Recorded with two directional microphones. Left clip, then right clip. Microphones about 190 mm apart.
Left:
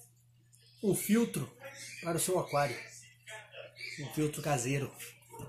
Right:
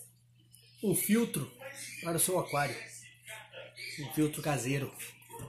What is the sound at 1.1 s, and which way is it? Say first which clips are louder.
Speech: even; centre (ahead or behind).